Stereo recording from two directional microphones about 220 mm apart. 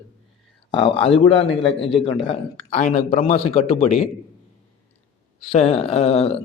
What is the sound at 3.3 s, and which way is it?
Speech, 25° left (ahead or behind).